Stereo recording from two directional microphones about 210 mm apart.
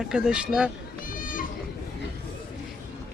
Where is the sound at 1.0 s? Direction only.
40° left (ahead or behind).